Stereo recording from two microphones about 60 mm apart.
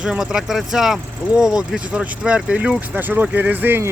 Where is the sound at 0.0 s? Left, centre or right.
Centre.